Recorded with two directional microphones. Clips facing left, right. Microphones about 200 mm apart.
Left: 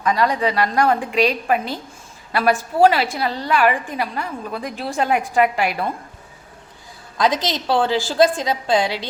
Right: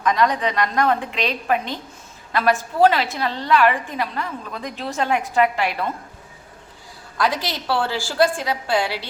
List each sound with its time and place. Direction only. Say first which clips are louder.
0.0 s a woman's voice: left 1 dB; 5° left (ahead or behind)
7.2 s a woman's voice: left 3 dB; 20° left (ahead or behind)